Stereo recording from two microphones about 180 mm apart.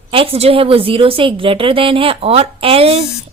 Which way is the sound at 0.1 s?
30° right (ahead or behind).